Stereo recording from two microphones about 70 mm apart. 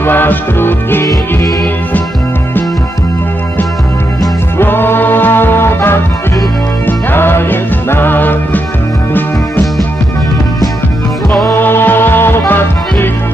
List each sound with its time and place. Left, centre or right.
0.0 s music: left
4.5 s music: left
11.4 s music: left